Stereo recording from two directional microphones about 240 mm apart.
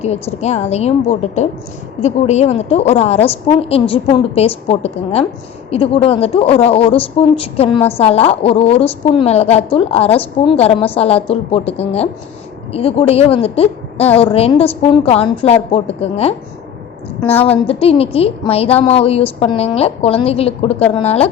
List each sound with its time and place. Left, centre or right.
0.0 s a woman's voice: left
17.7 s a woman's voice: left